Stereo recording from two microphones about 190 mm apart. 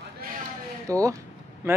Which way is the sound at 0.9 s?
15° right (ahead or behind).